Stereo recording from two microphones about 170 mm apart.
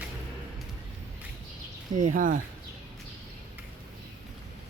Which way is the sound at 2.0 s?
50° right (ahead or behind).